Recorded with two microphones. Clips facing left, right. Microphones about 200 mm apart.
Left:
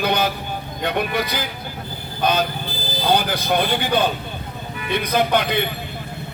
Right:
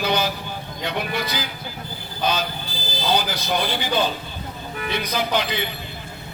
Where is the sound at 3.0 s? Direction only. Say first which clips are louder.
Left 3 dB; 55° left (ahead or behind).